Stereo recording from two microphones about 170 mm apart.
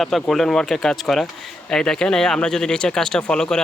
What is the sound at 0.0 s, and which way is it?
Speech, centre (ahead or behind).